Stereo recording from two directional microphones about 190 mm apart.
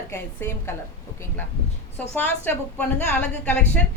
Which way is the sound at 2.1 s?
10° left (ahead or behind).